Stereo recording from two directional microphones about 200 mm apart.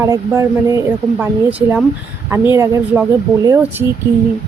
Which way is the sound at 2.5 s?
15° right (ahead or behind).